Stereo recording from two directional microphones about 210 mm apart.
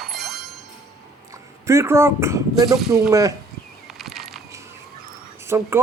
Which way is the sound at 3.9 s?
Centre (ahead or behind).